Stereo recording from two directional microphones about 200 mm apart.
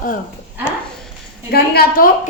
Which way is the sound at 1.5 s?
50° left (ahead or behind).